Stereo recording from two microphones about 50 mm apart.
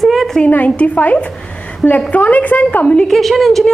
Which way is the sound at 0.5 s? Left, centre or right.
Left.